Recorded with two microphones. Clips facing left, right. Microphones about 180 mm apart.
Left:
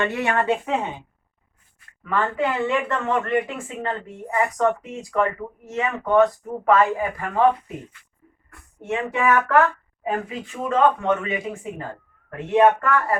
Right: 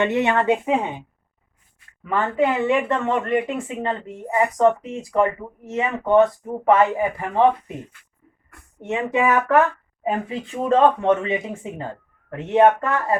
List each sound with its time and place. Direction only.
0.0 s speech: 20° right (ahead or behind)
2.0 s speech: 20° right (ahead or behind)
8.8 s speech: 20° right (ahead or behind)